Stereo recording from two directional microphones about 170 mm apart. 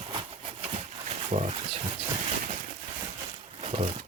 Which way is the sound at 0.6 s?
40° right (ahead or behind).